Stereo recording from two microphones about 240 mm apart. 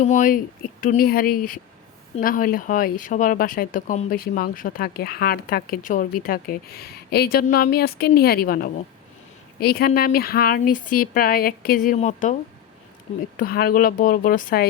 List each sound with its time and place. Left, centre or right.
0.0 s speech: left